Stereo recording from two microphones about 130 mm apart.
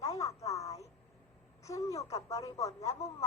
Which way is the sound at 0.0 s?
25° left (ahead or behind).